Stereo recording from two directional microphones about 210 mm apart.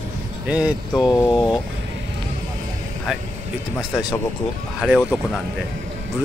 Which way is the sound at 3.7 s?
Centre (ahead or behind).